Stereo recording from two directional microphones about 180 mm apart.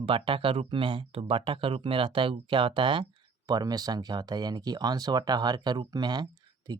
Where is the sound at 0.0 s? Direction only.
30° right (ahead or behind).